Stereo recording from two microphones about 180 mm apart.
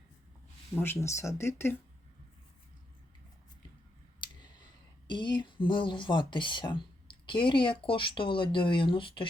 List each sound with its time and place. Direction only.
0.8 s speech: 15° left (ahead or behind)
5.0 s speech: 25° left (ahead or behind)